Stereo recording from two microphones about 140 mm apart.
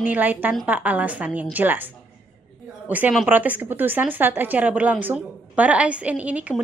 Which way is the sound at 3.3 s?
10° right (ahead or behind).